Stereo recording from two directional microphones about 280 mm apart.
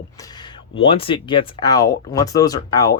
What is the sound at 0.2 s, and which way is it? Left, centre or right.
Speech, centre.